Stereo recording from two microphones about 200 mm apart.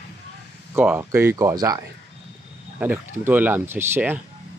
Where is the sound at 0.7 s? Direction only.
10° right (ahead or behind).